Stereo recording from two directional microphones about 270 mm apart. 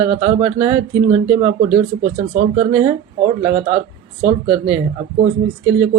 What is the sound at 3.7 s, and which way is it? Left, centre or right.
Speech, right.